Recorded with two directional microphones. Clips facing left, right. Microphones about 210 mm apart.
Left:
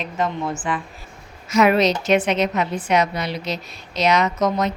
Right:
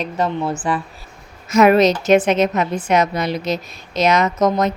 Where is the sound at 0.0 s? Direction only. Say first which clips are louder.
Right 3 dB; 35° right (ahead or behind).